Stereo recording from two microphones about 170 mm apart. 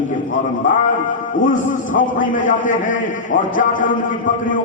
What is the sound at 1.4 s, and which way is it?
A man's voice, 50° left (ahead or behind).